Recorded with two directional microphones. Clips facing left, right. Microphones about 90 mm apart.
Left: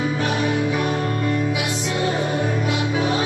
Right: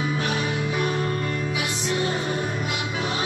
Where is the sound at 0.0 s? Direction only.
35° left (ahead or behind).